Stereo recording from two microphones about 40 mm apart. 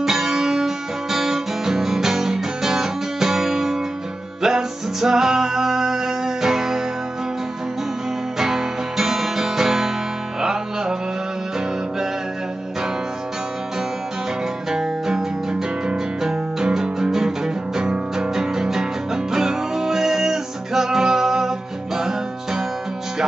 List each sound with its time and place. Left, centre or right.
0.0 s music: centre
8.4 s music: centre
14.7 s music: centre